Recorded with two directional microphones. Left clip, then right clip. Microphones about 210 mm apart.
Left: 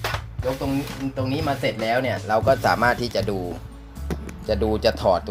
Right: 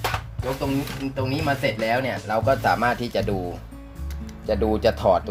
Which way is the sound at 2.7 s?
20° left (ahead or behind).